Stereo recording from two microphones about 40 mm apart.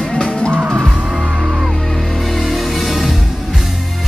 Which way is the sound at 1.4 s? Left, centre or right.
Centre.